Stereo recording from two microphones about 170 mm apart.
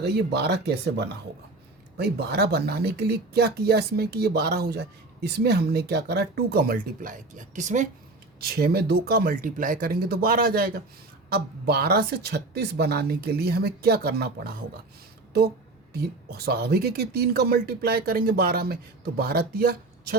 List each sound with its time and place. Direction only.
0.0 s speech: 75° right (ahead or behind); by 7.9 s 45° right (ahead or behind)
8.4 s speech: 65° right (ahead or behind)
15.9 s speech: 70° right (ahead or behind)